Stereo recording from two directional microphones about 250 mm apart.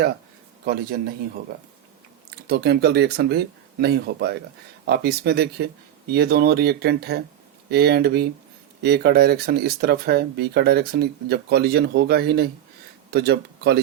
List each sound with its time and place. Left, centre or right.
0.6 s speech: right
2.5 s a man's voice: right